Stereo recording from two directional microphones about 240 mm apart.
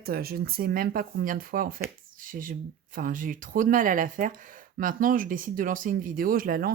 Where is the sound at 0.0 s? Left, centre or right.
Right.